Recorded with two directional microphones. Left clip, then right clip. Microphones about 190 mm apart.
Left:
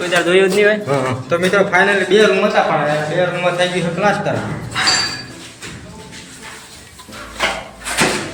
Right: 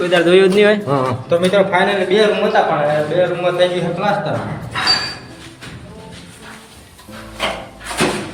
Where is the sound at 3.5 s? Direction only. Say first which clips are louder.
Even; 5° right (ahead or behind).